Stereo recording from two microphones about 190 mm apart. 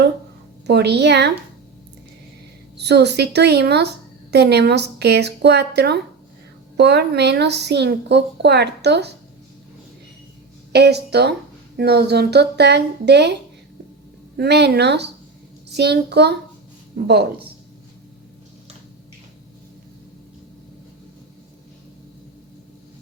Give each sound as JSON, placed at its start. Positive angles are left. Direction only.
{"t": 0.7, "sound": "a woman's voice", "side_deg": -60}
{"t": 2.7, "sound": "a woman's voice", "side_deg": -60}
{"t": 10.7, "sound": "a woman's voice", "side_deg": -60}
{"t": 14.3, "sound": "a woman's voice", "side_deg": -60}